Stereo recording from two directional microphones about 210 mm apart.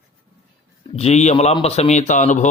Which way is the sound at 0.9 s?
30° left (ahead or behind).